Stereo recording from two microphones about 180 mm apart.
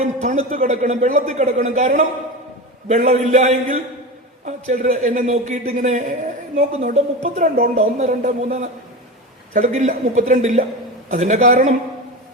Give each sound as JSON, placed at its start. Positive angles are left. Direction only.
{"t": 0.0, "sound": "a man's voice", "side_deg": -40}